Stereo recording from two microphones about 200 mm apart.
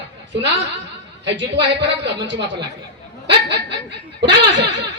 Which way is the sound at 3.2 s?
60° right (ahead or behind).